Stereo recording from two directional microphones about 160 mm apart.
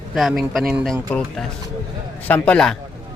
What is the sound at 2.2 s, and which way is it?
Speech, 10° left (ahead or behind).